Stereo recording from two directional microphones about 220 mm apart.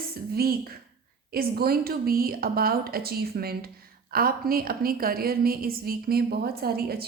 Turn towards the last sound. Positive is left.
turn(degrees=-45)  # may be behind; listen again after turning